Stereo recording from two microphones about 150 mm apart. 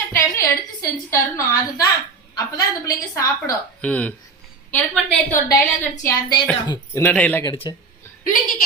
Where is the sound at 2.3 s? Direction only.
25° left (ahead or behind).